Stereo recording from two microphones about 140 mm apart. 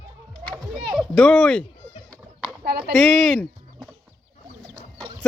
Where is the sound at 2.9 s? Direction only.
5° left (ahead or behind).